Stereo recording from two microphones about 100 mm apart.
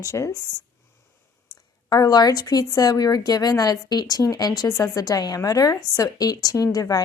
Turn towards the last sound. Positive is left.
turn(degrees=35)  # may be behind; listen again after turning